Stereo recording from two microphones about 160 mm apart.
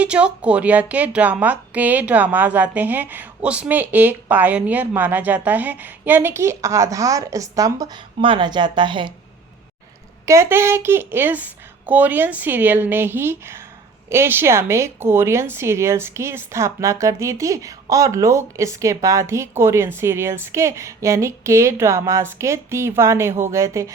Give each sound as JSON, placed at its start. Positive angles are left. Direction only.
{"t": 0.0, "sound": "speech", "side_deg": -5}
{"t": 10.2, "sound": "speech", "side_deg": -15}